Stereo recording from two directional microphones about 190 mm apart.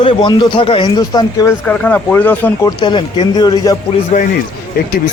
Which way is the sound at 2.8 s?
25° left (ahead or behind).